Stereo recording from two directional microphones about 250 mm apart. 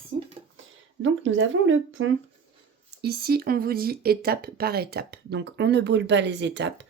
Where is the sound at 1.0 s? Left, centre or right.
Right.